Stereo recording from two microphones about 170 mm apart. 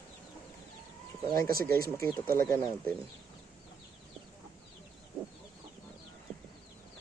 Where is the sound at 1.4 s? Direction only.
60° right (ahead or behind).